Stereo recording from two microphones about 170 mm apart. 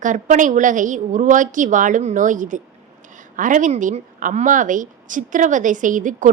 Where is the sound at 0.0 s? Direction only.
50° right (ahead or behind).